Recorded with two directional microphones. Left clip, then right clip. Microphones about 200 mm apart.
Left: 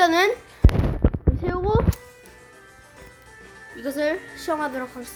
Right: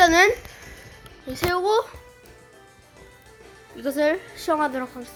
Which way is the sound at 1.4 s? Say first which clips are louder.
Right 3 dB; 20° right (ahead or behind).